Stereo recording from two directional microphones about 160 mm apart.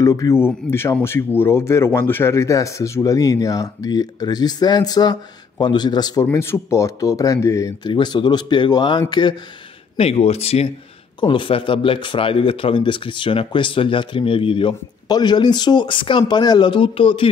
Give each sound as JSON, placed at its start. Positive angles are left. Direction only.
{"t": 0.0, "sound": "speech", "side_deg": 20}
{"t": 9.9, "sound": "speech", "side_deg": 40}